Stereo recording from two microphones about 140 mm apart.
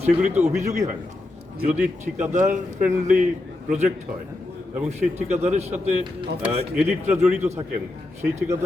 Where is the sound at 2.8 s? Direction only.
65° right (ahead or behind).